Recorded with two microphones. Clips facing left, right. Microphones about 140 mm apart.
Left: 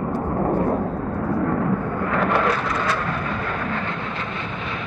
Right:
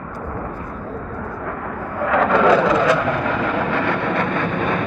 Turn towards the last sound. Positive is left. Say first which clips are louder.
# right 9 dB
turn(degrees=-55)  # may be behind; listen again after turning